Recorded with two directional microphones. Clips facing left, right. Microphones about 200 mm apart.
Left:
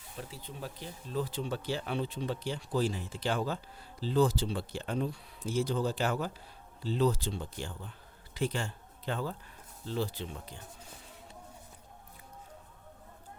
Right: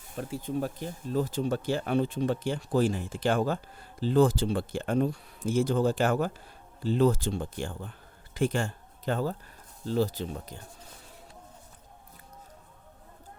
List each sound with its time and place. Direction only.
0.2 s speech: 50° right (ahead or behind)